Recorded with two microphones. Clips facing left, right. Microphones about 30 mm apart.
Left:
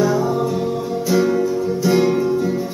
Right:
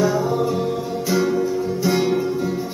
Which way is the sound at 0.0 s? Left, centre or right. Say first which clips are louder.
Left 1 dB; centre.